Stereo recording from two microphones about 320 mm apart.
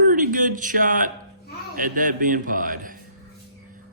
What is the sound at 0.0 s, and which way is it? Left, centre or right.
A man's voice, right.